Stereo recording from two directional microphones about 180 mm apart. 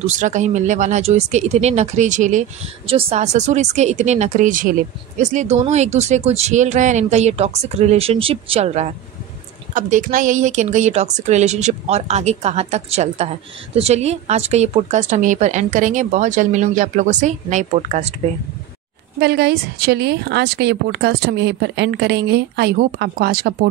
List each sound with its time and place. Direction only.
0.2 s speech: 40° right (ahead or behind)
2.9 s speech: 35° right (ahead or behind)
19.1 s speech: 60° right (ahead or behind)